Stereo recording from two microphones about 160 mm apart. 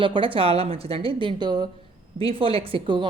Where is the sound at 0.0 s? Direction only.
30° right (ahead or behind).